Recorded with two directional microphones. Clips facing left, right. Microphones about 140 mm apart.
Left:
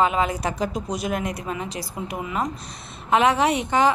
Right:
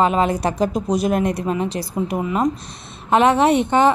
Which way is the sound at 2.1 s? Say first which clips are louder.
Right 6 dB; 40° right (ahead or behind).